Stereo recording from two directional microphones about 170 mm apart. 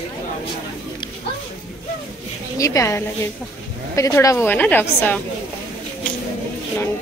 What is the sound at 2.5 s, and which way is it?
Speech, 20° left (ahead or behind).